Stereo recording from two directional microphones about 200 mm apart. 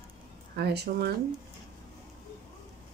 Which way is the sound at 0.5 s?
55° right (ahead or behind).